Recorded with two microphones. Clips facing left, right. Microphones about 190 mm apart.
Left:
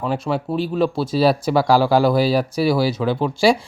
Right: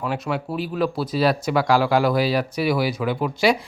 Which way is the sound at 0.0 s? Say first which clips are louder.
Left 3 dB; 30° left (ahead or behind).